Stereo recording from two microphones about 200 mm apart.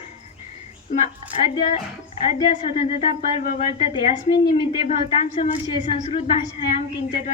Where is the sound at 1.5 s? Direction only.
30° left (ahead or behind).